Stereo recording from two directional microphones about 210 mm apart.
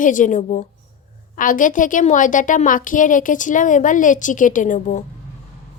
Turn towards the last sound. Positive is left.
turn(degrees=35)  # may be behind; listen again after turning